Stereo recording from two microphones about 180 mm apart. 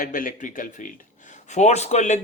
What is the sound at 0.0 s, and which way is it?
Speech, 50° left (ahead or behind).